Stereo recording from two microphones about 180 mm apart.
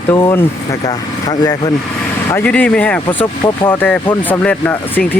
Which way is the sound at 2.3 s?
10° left (ahead or behind).